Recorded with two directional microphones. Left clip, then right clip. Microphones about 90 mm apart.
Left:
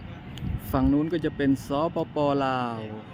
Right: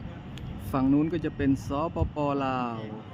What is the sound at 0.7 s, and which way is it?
Speech, 10° left (ahead or behind).